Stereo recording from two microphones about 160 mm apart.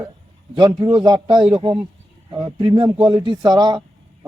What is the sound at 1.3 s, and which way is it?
Speech, 5° right (ahead or behind).